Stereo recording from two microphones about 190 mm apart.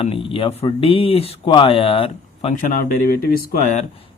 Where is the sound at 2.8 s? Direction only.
50° left (ahead or behind).